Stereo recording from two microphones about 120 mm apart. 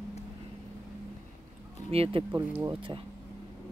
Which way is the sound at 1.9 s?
50° right (ahead or behind).